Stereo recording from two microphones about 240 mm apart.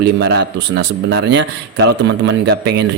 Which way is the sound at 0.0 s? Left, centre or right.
Right.